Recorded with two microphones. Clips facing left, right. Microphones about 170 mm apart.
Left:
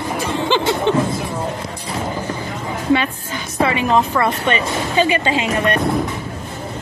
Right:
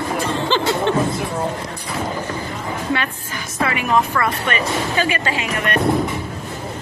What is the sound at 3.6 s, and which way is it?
Speech, 25° left (ahead or behind).